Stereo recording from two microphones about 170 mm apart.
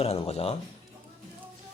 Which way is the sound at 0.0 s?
35° left (ahead or behind).